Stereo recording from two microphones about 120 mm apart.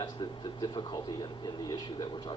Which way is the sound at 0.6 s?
35° left (ahead or behind).